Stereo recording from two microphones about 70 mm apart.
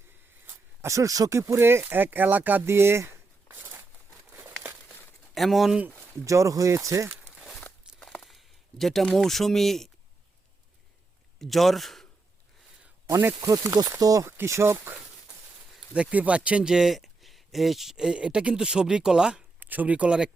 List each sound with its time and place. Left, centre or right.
0.9 s speech: right
3.5 s a sound: right
4.3 s crumpling: right
5.3 s speech: centre
6.2 s speech: right
7.3 s walk: centre
8.0 s a sound: centre
9.1 s speech: centre
11.3 s speech: centre
13.4 s speech: right
14.3 s speech: right
16.0 s speech: centre
19.5 s speech: right